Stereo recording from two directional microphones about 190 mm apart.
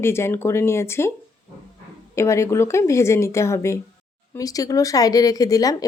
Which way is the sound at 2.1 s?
15° left (ahead or behind).